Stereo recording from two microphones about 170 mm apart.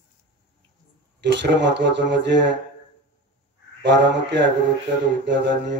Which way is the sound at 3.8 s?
90° right.